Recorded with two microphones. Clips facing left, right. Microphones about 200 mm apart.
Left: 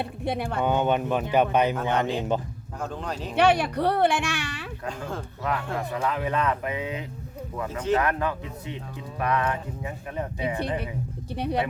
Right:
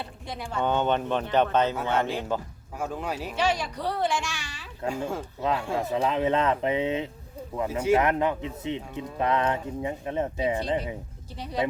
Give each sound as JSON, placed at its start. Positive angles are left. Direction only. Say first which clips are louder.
{"t": 0.0, "sound": "speech", "louder": "left 8 dB", "side_deg": 60}
{"t": 0.6, "sound": "speech", "louder": "even", "side_deg": 10}
{"t": 2.8, "sound": "speech", "louder": "right 1 dB", "side_deg": -10}
{"t": 3.3, "sound": "speech", "louder": "left 8 dB", "side_deg": 60}
{"t": 5.7, "sound": "a man's voice", "louder": "right 2 dB", "side_deg": -25}
{"t": 7.7, "sound": "speech", "louder": "right 2 dB", "side_deg": -10}
{"t": 8.0, "sound": "a man's voice", "louder": "right 2 dB", "side_deg": -20}
{"t": 11.3, "sound": "speech", "louder": "left 5 dB", "side_deg": 60}